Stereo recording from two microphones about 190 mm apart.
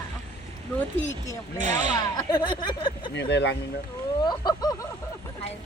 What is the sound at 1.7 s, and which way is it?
Speech, 20° left (ahead or behind).